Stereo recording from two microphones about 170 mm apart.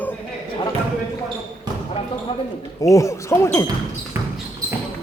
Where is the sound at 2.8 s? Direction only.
20° left (ahead or behind).